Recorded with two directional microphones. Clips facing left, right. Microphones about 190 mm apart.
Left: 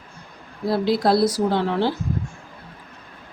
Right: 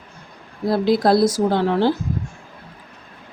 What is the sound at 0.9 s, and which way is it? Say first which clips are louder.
Speech: right 3 dB; 45° right (ahead or behind).